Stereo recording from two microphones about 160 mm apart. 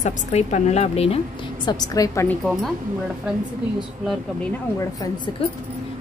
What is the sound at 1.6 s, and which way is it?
Speech, 25° left (ahead or behind).